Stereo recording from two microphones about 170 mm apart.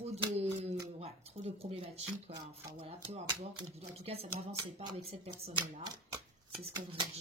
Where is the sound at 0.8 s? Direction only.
40° right (ahead or behind).